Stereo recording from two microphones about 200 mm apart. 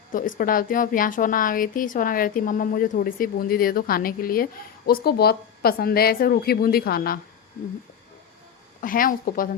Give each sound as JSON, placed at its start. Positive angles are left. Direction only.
{"t": 0.1, "sound": "a woman's voice", "side_deg": 40}
{"t": 8.8, "sound": "a woman's voice", "side_deg": 45}